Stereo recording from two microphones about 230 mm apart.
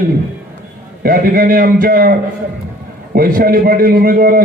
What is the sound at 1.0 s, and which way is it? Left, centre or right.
A man's voice, right.